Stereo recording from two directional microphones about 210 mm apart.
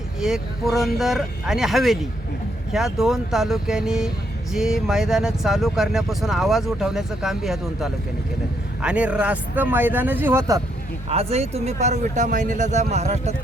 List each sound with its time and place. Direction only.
0.2 s a man's voice: 5° right (ahead or behind)
11.1 s speech: 30° right (ahead or behind)